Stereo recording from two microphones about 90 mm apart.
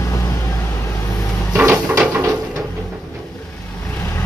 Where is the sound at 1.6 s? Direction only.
30° right (ahead or behind).